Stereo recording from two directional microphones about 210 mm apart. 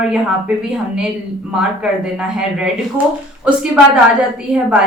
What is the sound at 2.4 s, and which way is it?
A woman's voice, 5° right (ahead or behind).